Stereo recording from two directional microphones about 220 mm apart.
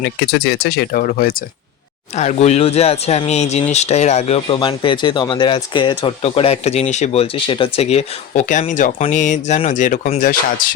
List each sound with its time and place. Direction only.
0.0 s speech: 50° left (ahead or behind)
2.1 s speech: 30° left (ahead or behind)